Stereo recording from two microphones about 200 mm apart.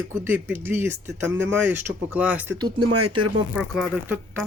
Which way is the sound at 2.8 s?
90° right.